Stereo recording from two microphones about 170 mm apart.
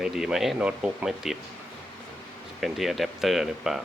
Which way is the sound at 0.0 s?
5° right (ahead or behind).